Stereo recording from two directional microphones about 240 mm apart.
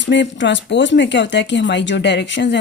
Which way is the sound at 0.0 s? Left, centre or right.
Left.